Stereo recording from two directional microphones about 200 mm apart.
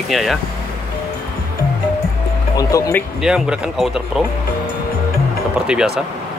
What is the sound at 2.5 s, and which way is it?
Speech, 15° left (ahead or behind).